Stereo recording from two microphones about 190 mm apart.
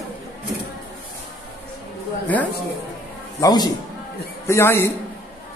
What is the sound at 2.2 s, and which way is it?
Speech, 10° left (ahead or behind).